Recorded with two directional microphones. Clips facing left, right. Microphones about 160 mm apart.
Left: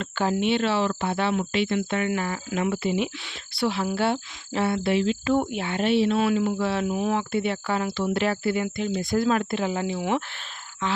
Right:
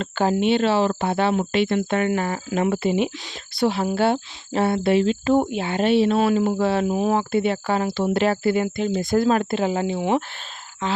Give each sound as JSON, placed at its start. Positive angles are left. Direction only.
{"t": 0.0, "sound": "speech", "side_deg": -35}
{"t": 1.5, "sound": "speech", "side_deg": -50}
{"t": 9.0, "sound": "speech", "side_deg": -45}
{"t": 9.3, "sound": "speech", "side_deg": -35}